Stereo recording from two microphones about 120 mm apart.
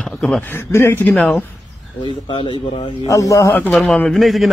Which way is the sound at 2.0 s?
40° left (ahead or behind).